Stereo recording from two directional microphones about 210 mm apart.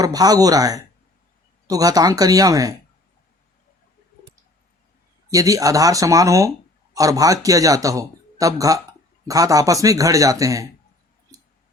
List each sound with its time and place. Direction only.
0.0 s speech: 15° right (ahead or behind)
5.3 s speech: 15° right (ahead or behind)
11.3 s a sound: 15° right (ahead or behind)